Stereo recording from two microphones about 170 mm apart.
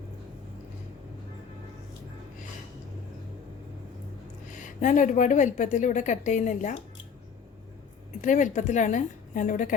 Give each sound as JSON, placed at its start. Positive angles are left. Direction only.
{"t": 4.6, "sound": "a woman's voice", "side_deg": 50}
{"t": 8.2, "sound": "a woman's voice", "side_deg": 45}